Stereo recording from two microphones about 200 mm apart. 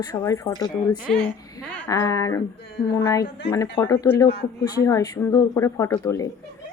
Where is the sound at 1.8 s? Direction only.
15° left (ahead or behind).